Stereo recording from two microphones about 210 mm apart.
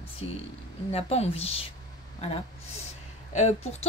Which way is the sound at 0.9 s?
30° left (ahead or behind).